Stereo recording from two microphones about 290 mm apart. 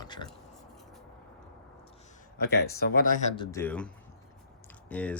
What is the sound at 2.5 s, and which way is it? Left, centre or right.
Speech, left.